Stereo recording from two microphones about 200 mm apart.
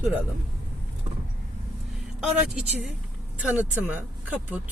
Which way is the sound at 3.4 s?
10° right (ahead or behind).